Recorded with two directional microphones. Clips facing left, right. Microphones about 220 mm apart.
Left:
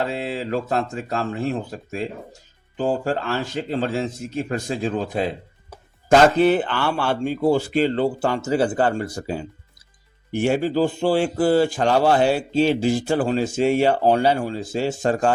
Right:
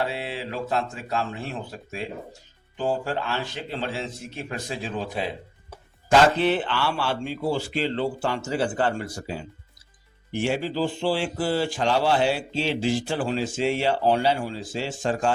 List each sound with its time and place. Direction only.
0.1 s speech: 45° left (ahead or behind)